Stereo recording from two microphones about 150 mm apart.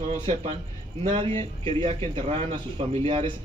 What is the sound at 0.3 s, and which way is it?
A man's voice, 45° right (ahead or behind).